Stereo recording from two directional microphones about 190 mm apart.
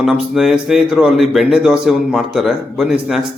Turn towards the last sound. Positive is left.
turn(degrees=0)  # may be behind; listen again after turning